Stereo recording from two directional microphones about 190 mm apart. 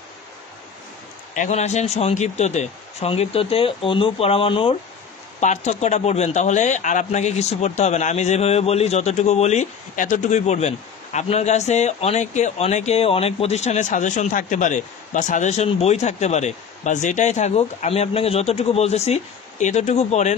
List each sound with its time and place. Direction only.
1.3 s a man's voice: 40° left (ahead or behind)